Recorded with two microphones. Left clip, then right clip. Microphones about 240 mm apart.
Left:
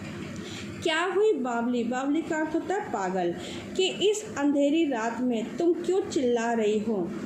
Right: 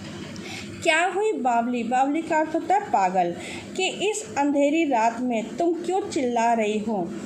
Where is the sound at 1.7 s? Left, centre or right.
Right.